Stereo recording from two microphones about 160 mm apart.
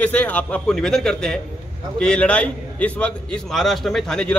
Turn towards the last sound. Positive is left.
turn(degrees=5)  # may be behind; listen again after turning